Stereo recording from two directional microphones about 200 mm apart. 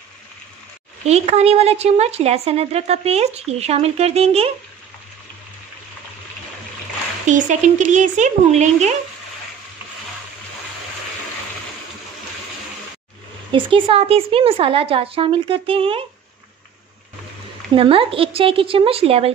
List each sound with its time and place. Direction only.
1.0 s a woman's voice: 30° right (ahead or behind)
7.2 s a woman's voice: 40° right (ahead or behind)
13.5 s a woman's voice: 25° right (ahead or behind)
17.7 s a woman's voice: 25° right (ahead or behind)